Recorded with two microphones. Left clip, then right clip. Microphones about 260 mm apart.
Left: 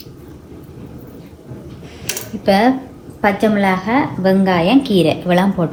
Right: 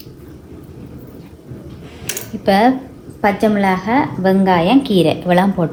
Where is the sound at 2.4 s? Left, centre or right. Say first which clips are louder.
Right 1 dB; right.